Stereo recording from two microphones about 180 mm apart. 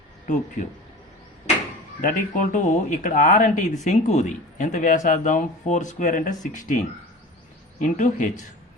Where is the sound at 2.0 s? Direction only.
45° left (ahead or behind).